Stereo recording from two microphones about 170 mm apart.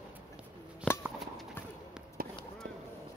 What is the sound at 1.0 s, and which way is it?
Clip-clop, centre (ahead or behind).